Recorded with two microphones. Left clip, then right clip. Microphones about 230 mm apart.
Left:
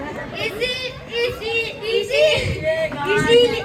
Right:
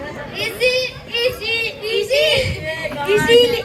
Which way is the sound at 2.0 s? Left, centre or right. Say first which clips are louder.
Right 1 dB; right.